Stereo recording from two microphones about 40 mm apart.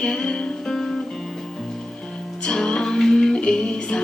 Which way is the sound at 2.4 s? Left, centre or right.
Centre.